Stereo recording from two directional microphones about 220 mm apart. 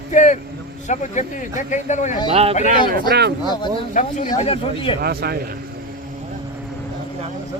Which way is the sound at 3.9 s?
35° left (ahead or behind).